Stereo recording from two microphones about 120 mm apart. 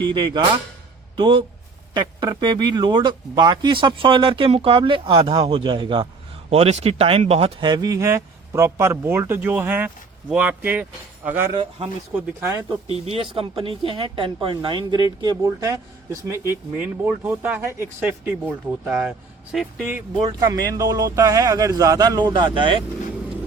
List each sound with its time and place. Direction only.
0.0 s speech: 40° right (ahead or behind)
6.5 s speech: 60° right (ahead or behind)
7.6 s speech: 35° right (ahead or behind); by 11.4 s 15° right (ahead or behind)
11.5 s a woman's voice: 45° right (ahead or behind)
12.1 s speech: 15° right (ahead or behind)
12.9 s a woman's voice: 55° right (ahead or behind); by 15.4 s 40° right (ahead or behind)
15.4 s speech: 25° right (ahead or behind)
16.7 s speech: 10° right (ahead or behind)
18.9 s speech: 10° right (ahead or behind)
20.5 s speech: 30° right (ahead or behind)